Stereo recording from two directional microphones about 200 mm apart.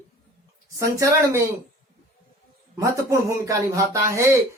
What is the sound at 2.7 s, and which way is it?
Speech, 15° right (ahead or behind).